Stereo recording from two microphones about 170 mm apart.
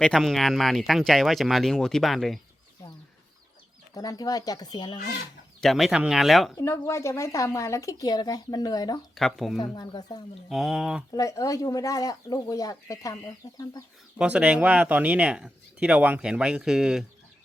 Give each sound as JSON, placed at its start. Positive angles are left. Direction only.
{"t": 0.0, "sound": "speech", "side_deg": 0}
{"t": 3.9, "sound": "speech", "side_deg": 20}
{"t": 5.5, "sound": "speech", "side_deg": 0}
{"t": 6.6, "sound": "speech", "side_deg": 15}
{"t": 9.1, "sound": "speech", "side_deg": 0}
{"t": 9.7, "sound": "speech", "side_deg": 25}
{"t": 10.5, "sound": "speech", "side_deg": 0}
{"t": 11.1, "sound": "speech", "side_deg": 20}
{"t": 14.2, "sound": "speech", "side_deg": -5}